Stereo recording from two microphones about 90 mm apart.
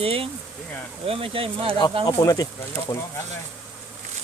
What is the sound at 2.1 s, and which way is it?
Speech, 40° left (ahead or behind).